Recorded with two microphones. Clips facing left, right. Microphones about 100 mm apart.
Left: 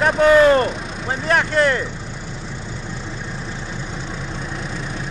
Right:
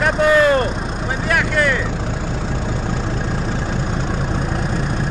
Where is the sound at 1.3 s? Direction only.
30° left (ahead or behind).